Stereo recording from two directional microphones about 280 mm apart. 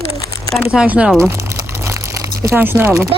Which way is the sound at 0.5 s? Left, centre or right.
Centre.